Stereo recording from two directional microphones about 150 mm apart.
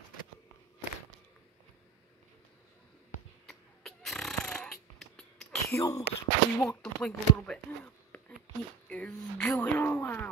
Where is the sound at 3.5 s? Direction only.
Centre (ahead or behind).